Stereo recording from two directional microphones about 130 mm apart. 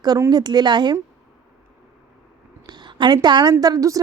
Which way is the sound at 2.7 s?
35° right (ahead or behind).